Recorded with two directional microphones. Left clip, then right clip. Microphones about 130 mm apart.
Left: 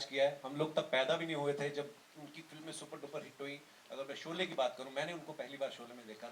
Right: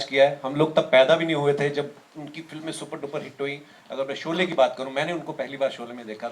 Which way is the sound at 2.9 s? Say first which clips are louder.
Right 13 dB; 30° right (ahead or behind).